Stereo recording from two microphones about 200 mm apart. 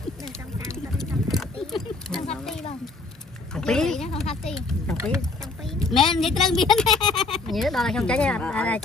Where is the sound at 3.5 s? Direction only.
5° left (ahead or behind).